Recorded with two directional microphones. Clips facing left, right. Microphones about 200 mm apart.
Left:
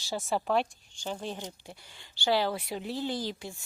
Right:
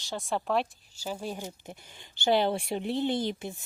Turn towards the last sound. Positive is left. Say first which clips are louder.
# right 4 dB
turn(degrees=-20)  # may be behind; listen again after turning